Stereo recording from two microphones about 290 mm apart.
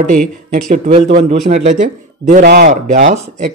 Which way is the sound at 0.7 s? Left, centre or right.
Right.